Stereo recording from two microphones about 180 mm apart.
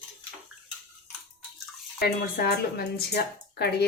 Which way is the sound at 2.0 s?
60° left (ahead or behind).